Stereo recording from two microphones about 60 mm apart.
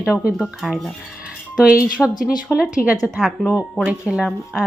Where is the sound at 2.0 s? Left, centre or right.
Centre.